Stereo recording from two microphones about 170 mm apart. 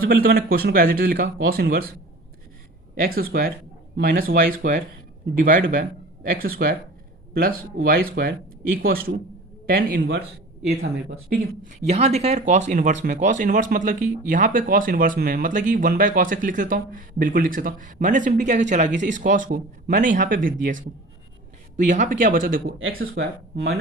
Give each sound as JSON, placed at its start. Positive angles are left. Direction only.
{"t": 0.0, "sound": "speech", "side_deg": -60}
{"t": 2.9, "sound": "speech", "side_deg": -60}
{"t": 11.3, "sound": "speech", "side_deg": -55}
{"t": 11.9, "sound": "speech", "side_deg": -40}
{"t": 21.8, "sound": "speech", "side_deg": -45}